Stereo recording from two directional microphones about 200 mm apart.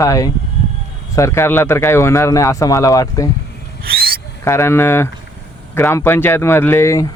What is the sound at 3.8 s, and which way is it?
Owl, 50° right (ahead or behind).